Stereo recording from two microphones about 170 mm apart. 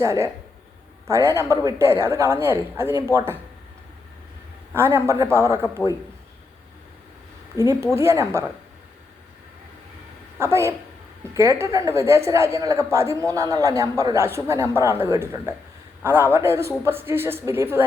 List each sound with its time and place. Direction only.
0.0 s a woman's voice: 20° right (ahead or behind)
4.7 s a woman's voice: 15° right (ahead or behind)
7.6 s a woman's voice: 15° right (ahead or behind)
10.3 s a woman's voice: 15° right (ahead or behind)